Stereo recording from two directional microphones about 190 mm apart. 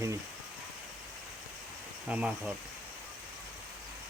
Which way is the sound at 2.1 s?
5° right (ahead or behind).